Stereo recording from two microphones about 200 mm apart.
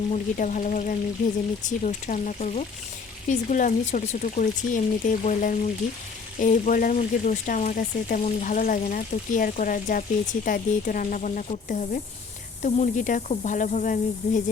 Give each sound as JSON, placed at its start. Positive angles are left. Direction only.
{"t": 0.1, "sound": "speech", "side_deg": 40}